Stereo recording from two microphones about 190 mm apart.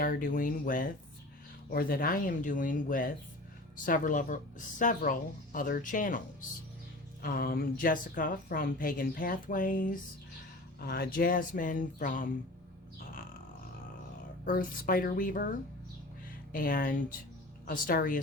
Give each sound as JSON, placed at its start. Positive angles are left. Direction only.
{"t": 0.0, "sound": "a woman's voice", "side_deg": 45}
{"t": 14.4, "sound": "a woman's voice", "side_deg": 50}
{"t": 16.5, "sound": "a woman's voice", "side_deg": 45}